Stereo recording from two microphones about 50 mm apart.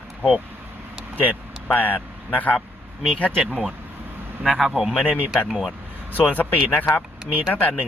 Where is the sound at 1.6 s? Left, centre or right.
Left.